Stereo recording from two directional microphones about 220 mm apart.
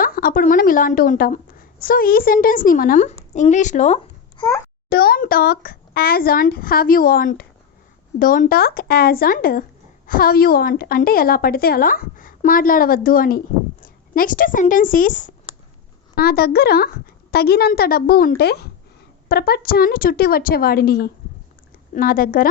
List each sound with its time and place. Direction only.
0.0 s a woman's voice: 40° left (ahead or behind)
4.9 s a woman's voice: 45° left (ahead or behind)